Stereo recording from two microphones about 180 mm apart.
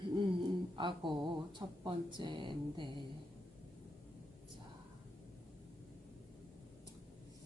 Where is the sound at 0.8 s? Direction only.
25° right (ahead or behind).